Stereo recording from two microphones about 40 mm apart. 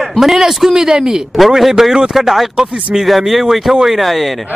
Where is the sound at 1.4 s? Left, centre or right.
Centre.